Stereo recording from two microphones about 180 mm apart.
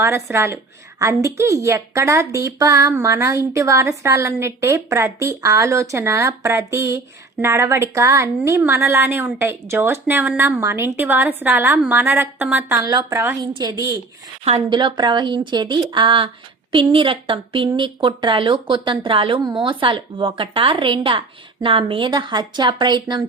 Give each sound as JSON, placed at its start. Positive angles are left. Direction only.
{"t": 0.0, "sound": "a woman's voice", "side_deg": -15}
{"t": 14.4, "sound": "speech", "side_deg": -30}